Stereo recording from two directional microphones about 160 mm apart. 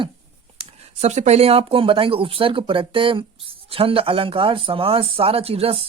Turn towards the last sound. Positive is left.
turn(degrees=-40)  # may be behind; listen again after turning